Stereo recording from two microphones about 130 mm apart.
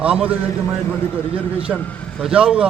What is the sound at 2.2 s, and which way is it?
Speech, 5° right (ahead or behind).